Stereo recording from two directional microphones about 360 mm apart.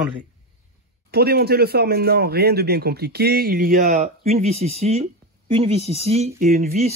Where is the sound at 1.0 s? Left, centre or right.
Right.